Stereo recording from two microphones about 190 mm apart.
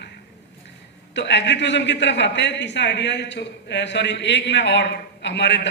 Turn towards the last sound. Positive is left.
turn(degrees=65)  # may be behind; listen again after turning